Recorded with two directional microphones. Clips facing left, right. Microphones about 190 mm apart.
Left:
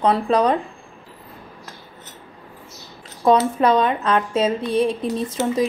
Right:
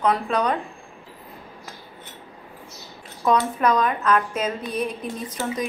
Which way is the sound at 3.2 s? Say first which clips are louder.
Left 4 dB; 30° left (ahead or behind).